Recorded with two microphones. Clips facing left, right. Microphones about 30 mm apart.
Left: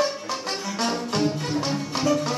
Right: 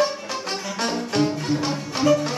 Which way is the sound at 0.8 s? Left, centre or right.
Centre.